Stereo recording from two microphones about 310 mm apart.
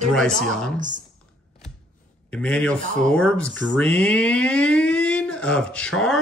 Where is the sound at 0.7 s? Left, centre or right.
Right.